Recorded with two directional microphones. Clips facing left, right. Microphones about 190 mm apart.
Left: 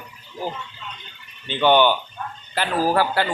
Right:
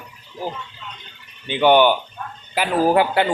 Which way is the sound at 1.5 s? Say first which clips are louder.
Right 3 dB; 15° right (ahead or behind).